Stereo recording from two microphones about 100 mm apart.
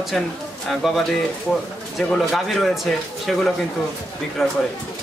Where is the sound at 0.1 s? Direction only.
Centre (ahead or behind).